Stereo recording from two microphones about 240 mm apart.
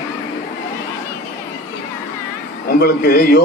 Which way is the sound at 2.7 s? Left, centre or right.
Left.